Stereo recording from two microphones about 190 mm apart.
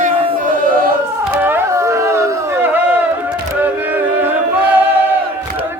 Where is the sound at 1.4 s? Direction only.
10° right (ahead or behind).